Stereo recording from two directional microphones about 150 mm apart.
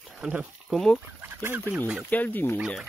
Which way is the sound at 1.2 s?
15° right (ahead or behind).